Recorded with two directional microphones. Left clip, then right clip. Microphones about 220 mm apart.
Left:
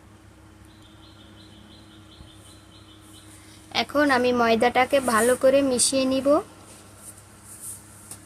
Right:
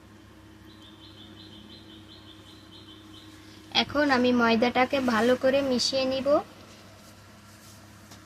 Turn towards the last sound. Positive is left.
turn(degrees=30)  # may be behind; listen again after turning